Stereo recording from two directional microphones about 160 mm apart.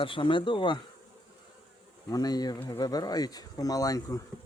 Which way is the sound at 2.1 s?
25° left (ahead or behind).